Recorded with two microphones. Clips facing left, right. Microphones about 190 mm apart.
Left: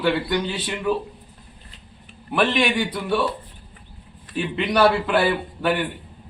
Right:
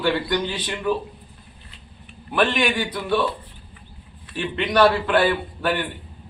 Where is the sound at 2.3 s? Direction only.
5° left (ahead or behind).